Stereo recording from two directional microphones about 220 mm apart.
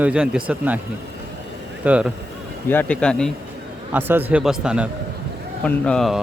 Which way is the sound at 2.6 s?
5° left (ahead or behind).